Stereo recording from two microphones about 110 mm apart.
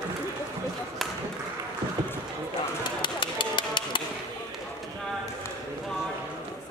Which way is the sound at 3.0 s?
45° left (ahead or behind).